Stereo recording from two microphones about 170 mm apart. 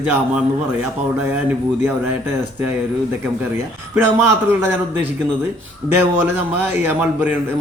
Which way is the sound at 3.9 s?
15° right (ahead or behind).